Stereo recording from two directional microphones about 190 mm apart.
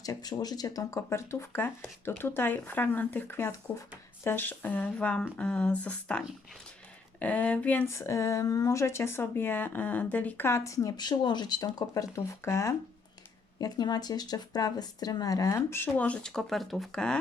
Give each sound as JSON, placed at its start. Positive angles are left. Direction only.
{"t": 0.0, "sound": "speech", "side_deg": 20}